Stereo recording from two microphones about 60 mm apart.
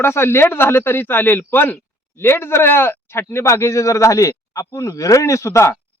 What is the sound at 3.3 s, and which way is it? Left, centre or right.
A man's voice, left.